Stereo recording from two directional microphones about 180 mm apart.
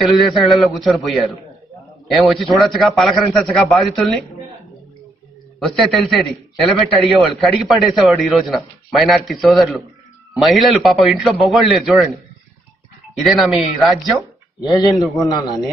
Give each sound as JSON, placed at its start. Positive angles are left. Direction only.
{"t": 0.0, "sound": "a man's voice", "side_deg": 0}
{"t": 5.8, "sound": "a man's voice", "side_deg": 0}
{"t": 13.2, "sound": "a man's voice", "side_deg": 0}
{"t": 15.1, "sound": "a man's voice", "side_deg": 20}